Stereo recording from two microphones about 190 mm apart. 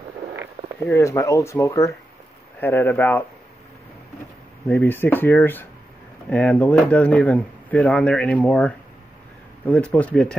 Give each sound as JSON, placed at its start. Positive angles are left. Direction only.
{"t": 0.8, "sound": "speech", "side_deg": 15}
{"t": 4.6, "sound": "speech", "side_deg": 10}